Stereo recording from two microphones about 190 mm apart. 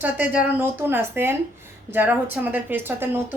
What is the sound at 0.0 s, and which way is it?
A woman's voice, 5° right (ahead or behind).